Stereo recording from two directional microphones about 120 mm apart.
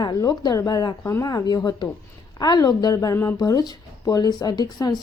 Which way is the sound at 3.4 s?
30° left (ahead or behind).